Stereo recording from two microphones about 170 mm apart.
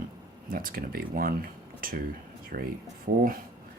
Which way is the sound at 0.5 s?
60° right (ahead or behind).